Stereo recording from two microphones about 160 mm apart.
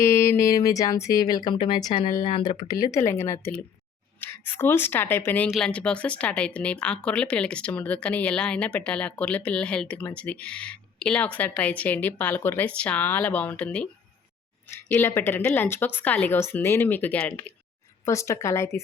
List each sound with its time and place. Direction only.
0.0 s speech: 15° left (ahead or behind)
14.8 s speech: 10° left (ahead or behind)